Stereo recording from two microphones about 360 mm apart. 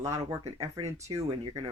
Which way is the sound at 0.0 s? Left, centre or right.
Centre.